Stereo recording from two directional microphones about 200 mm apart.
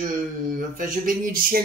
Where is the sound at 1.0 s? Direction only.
45° right (ahead or behind).